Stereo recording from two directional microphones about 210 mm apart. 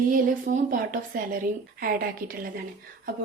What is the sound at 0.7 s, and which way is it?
A woman's voice, 40° right (ahead or behind).